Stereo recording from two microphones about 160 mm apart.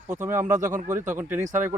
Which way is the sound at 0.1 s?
15° right (ahead or behind).